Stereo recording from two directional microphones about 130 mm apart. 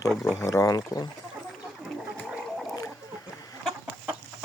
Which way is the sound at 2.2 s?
5° right (ahead or behind).